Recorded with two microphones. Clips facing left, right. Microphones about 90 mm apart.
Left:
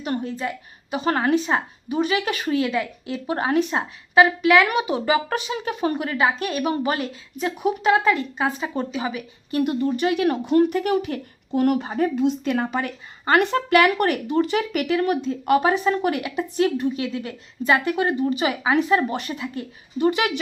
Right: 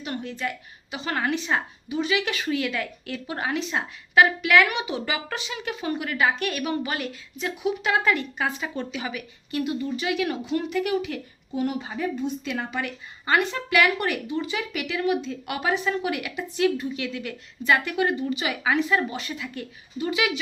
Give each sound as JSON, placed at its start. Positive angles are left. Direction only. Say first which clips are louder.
{"t": 0.0, "sound": "a woman's voice", "louder": "left 4 dB", "side_deg": 40}
{"t": 2.6, "sound": "a woman's voice", "louder": "left 5 dB", "side_deg": 30}
{"t": 3.7, "sound": "speech", "louder": "left 3 dB", "side_deg": 25}
{"t": 4.7, "sound": "a woman's voice", "louder": "left 7 dB", "side_deg": 40}
{"t": 6.1, "sound": "a woman's voice", "louder": "left 2 dB", "side_deg": 30}
{"t": 9.6, "sound": "speech", "louder": "left 6 dB", "side_deg": 50}
{"t": 11.5, "sound": "speech", "louder": "left 7 dB", "side_deg": 60}
{"t": 12.5, "sound": "a woman's voice", "louder": "left 6 dB", "side_deg": 45}
{"t": 20.0, "sound": "speech", "louder": "left 5 dB", "side_deg": 50}